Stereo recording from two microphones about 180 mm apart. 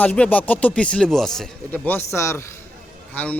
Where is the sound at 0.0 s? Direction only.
10° left (ahead or behind).